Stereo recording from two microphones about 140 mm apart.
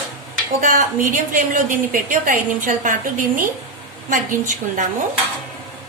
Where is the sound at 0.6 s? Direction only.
70° right (ahead or behind).